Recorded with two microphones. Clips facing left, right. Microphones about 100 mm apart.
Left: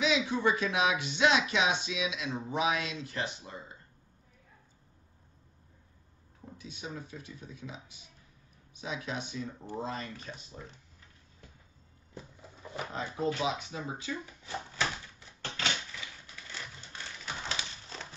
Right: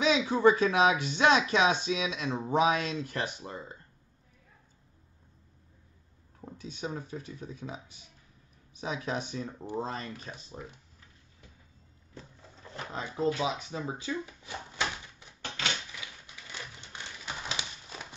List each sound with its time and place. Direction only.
0.0 s speech: 40° right (ahead or behind)
6.6 s speech: 35° right (ahead or behind)
8.8 s speech: 40° right (ahead or behind)
12.1 s cupboard open or close: 15° left (ahead or behind)
12.9 s speech: 30° right (ahead or behind)
14.2 s a sound: 20° right (ahead or behind)
17.5 s crumpling: 15° right (ahead or behind)